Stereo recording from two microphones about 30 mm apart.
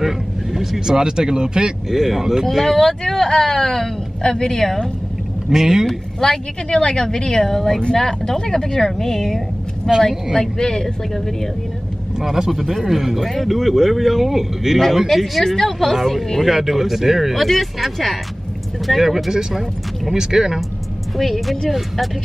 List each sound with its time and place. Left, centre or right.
0.0 s vehicle: centre
0.7 s speech: right
1.9 s speech: centre
2.4 s a woman's voice: centre
5.5 s speech: centre
6.2 s speech: centre
7.4 s a woman's voice: centre
10.4 s speech: left
12.2 s a man's voice: centre
15.4 s a woman's voice: centre
15.9 s a man's voice: centre
16.4 s speech: centre
17.4 s a man's voice: centre
21.2 s a man's voice: centre